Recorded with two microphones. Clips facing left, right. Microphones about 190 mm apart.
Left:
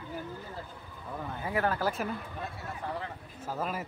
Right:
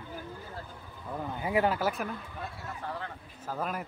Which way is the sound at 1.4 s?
15° right (ahead or behind).